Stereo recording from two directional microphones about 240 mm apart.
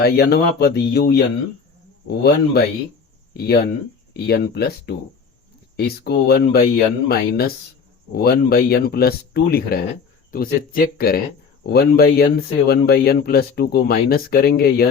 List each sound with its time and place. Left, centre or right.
0.0 s speech: left